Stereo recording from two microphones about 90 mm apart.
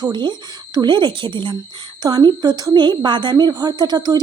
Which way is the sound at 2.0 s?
55° right (ahead or behind).